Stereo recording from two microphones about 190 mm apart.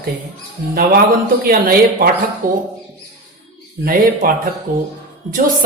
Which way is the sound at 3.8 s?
50° right (ahead or behind).